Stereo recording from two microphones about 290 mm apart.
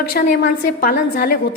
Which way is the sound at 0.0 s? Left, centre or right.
Left.